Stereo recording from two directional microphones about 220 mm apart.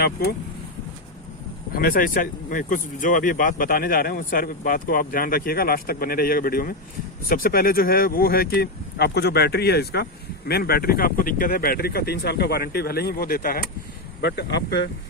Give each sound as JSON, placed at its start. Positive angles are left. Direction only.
{"t": 1.7, "sound": "speech", "side_deg": 40}